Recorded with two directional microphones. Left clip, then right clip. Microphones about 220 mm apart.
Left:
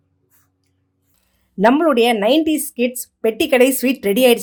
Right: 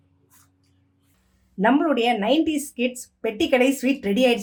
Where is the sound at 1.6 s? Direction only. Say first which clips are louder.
Left 6 dB; 40° left (ahead or behind).